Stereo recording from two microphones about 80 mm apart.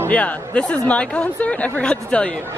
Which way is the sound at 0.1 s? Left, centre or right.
Centre.